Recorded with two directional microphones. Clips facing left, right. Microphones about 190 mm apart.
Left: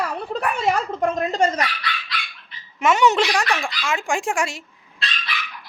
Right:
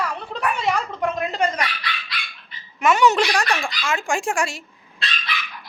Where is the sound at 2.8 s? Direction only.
20° left (ahead or behind).